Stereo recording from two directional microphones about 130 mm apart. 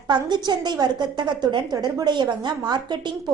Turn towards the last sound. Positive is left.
turn(degrees=-35)  # may be behind; listen again after turning